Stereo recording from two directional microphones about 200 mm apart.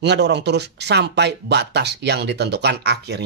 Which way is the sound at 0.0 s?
60° right (ahead or behind).